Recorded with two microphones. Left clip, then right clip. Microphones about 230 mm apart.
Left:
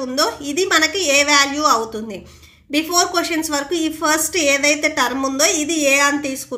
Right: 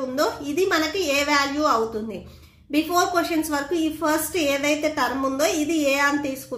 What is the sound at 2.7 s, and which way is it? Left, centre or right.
A woman's voice, left.